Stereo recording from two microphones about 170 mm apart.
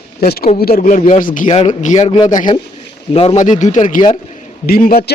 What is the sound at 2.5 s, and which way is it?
Speech, 25° left (ahead or behind).